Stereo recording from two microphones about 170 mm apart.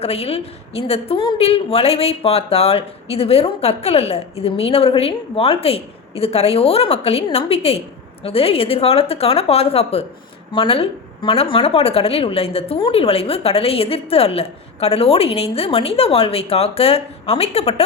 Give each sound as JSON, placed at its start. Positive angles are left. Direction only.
{"t": 0.0, "sound": "a woman's voice", "side_deg": 35}